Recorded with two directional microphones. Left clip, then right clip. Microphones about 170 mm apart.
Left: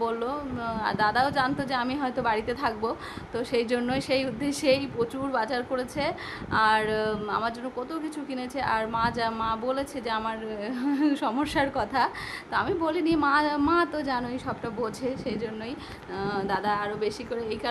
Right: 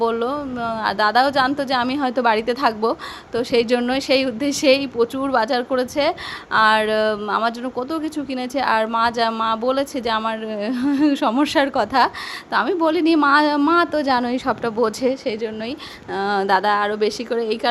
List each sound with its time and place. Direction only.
0.0 s a woman's voice: 35° right (ahead or behind)